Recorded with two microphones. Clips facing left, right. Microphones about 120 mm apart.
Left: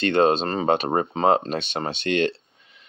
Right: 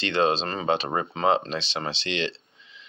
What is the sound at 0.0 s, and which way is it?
Speech, 50° left (ahead or behind).